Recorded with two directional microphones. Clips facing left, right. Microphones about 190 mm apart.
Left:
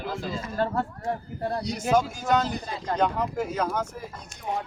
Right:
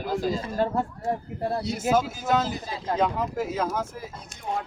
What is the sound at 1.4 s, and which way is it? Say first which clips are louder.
Speech: right 2 dB; 5° right (ahead or behind).